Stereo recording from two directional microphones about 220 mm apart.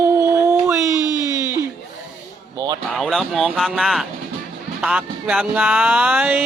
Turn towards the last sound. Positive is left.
turn(degrees=-5)  # may be behind; listen again after turning